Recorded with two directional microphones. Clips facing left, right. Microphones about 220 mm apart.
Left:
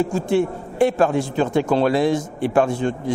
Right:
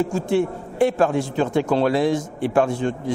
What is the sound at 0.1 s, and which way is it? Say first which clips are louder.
Speech: left 1 dB; 15° left (ahead or behind).